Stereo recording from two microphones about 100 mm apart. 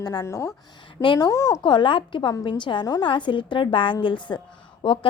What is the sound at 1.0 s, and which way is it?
Speech, 55° left (ahead or behind).